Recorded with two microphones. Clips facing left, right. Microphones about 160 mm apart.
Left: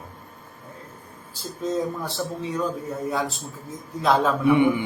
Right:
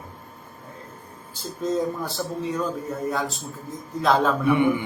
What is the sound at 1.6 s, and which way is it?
Speech, centre (ahead or behind).